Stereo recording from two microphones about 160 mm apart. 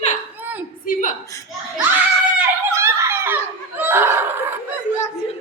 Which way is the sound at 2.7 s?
15° right (ahead or behind).